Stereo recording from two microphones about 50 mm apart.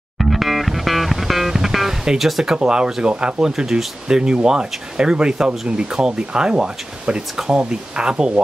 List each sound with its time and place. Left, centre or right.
0.2 s music: centre
2.5 s speech: centre